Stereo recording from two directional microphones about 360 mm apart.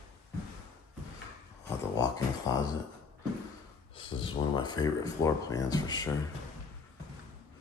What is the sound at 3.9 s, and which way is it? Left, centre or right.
Speech, centre.